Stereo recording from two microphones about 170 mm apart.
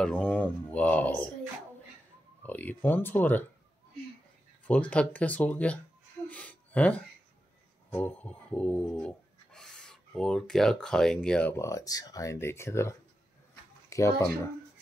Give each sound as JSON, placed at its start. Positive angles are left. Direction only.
{"t": 0.0, "sound": "speech", "side_deg": 5}
{"t": 2.4, "sound": "speech", "side_deg": 10}
{"t": 4.6, "sound": "speech", "side_deg": 5}
{"t": 6.2, "sound": "a sound", "side_deg": 10}
{"t": 7.9, "sound": "rub", "side_deg": 10}
{"t": 13.8, "sound": "speech", "side_deg": 20}